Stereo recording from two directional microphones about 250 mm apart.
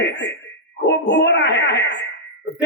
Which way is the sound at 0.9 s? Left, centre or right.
Left.